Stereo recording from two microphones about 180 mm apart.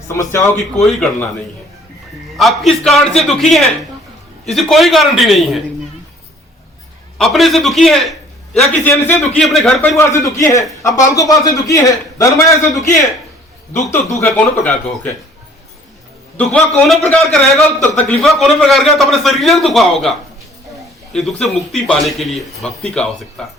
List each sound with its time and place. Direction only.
0.2 s speech: 15° left (ahead or behind)
0.5 s a man's voice: centre (ahead or behind)
2.3 s a man's voice: centre (ahead or behind)
7.2 s a man's voice: centre (ahead or behind)
10.0 s a man's voice: 20° left (ahead or behind)
14.3 s a man's voice: 5° left (ahead or behind)
16.4 s a man's voice: 5° left (ahead or behind)